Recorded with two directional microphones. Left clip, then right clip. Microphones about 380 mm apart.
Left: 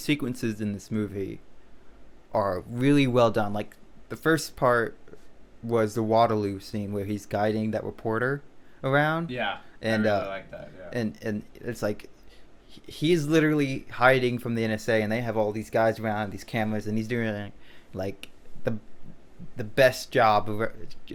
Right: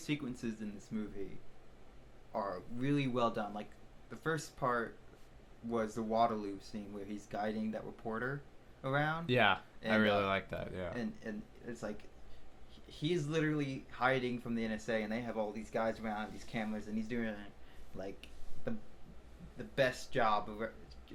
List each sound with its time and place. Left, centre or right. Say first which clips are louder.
0.0 s speech: left 12 dB; left
2.3 s speech: left 13 dB; left
9.2 s speech: even; right
9.8 s speech: left 7 dB; left
10.5 s speech: left 2 dB; right
10.9 s speech: left 12 dB; left
17.9 s a sound: left 12 dB; left
19.5 s speech: left 13 dB; left